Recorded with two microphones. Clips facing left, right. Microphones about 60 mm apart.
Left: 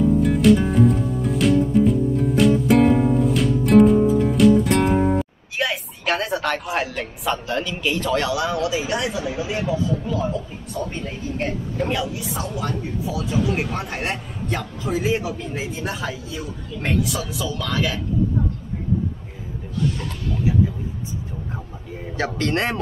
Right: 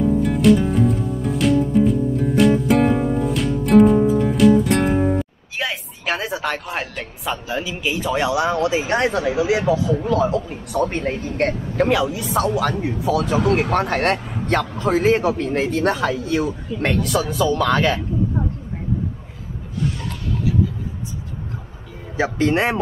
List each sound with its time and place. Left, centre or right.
0.2 s music: centre
4.9 s a woman's voice: centre; by 9.1 s right
9.1 s a man's voice: right
22.1 s speech: centre